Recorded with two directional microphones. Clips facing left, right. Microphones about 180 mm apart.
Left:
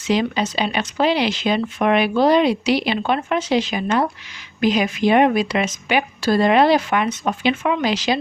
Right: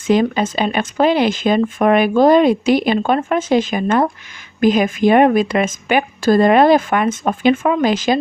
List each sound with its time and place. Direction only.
0.1 s speech: 50° right (ahead or behind)